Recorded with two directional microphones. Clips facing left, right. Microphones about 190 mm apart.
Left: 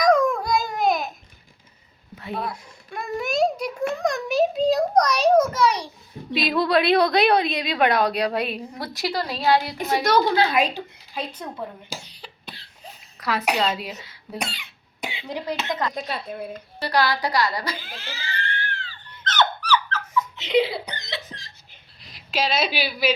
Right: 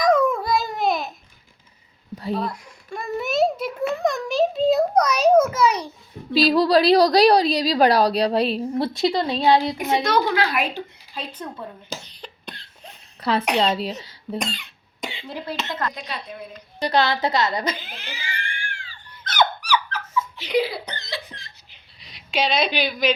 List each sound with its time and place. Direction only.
0.0 s babbling: 5° right (ahead or behind)
2.3 s a sound: centre (ahead or behind)
6.3 s a woman's voice: 35° right (ahead or behind)
10.3 s speech: 25° left (ahead or behind)
11.3 s a sound: 10° left (ahead or behind)
13.1 s a sound: 30° right (ahead or behind)
13.6 s a woman's voice: 30° right (ahead or behind)
14.3 s speech: 10° left (ahead or behind)
16.1 s a woman's voice: 5° left (ahead or behind)
16.8 s a sound: 25° right (ahead or behind)
20.3 s speech: 25° left (ahead or behind)
20.8 s laughter: 15° left (ahead or behind)
21.2 s laughter: 45° left (ahead or behind)
22.0 s a woman's voice: centre (ahead or behind)